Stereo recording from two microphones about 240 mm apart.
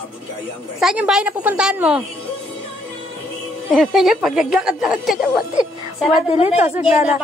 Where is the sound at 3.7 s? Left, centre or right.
Centre.